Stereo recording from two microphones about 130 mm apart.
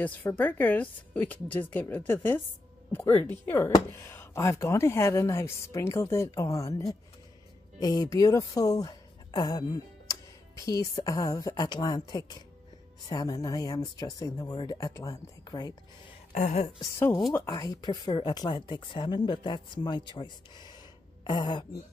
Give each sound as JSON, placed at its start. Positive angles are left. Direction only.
{"t": 0.0, "sound": "a woman's voice", "side_deg": 10}
{"t": 7.8, "sound": "speech", "side_deg": 30}
{"t": 16.3, "sound": "a woman's voice", "side_deg": 70}
{"t": 16.8, "sound": "speech", "side_deg": 20}